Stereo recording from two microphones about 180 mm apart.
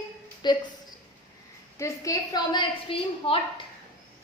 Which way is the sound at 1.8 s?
20° left (ahead or behind).